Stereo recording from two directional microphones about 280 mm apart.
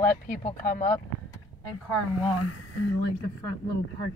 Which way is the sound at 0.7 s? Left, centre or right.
Left.